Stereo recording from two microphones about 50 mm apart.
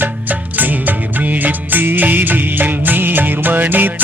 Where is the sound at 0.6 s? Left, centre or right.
Right.